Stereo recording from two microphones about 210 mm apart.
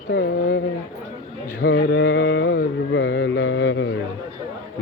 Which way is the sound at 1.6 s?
50° left (ahead or behind).